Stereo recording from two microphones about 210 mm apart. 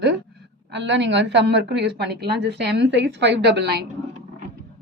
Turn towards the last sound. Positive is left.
turn(degrees=-50)  # may be behind; listen again after turning